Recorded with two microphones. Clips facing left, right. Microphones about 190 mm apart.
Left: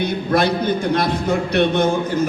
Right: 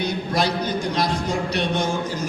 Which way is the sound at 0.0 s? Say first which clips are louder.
Left 5 dB; 55° left (ahead or behind).